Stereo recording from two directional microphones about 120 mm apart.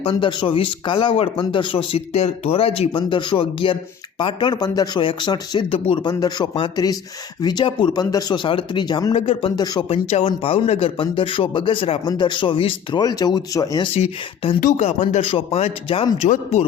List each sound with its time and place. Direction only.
0.0 s speech: 40° left (ahead or behind)
9.1 s speech: 50° left (ahead or behind)
13.0 s speech: 30° left (ahead or behind)
13.9 s speech: 60° left (ahead or behind); by 15.2 s 80° left
15.2 s speech: 50° left (ahead or behind)